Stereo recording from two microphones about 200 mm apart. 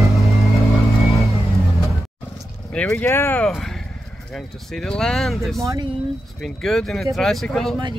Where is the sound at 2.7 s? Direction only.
5° left (ahead or behind).